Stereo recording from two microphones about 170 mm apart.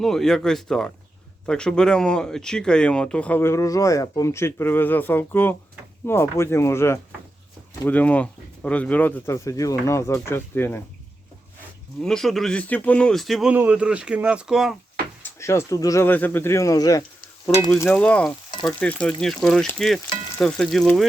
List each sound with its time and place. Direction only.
0.0 s speech: centre (ahead or behind)
11.9 s speech: 5° left (ahead or behind)
15.2 s speech: 15° left (ahead or behind)
17.7 s speech: 10° left (ahead or behind)